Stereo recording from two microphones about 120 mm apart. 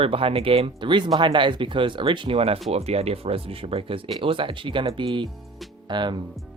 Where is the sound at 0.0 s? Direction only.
50° right (ahead or behind).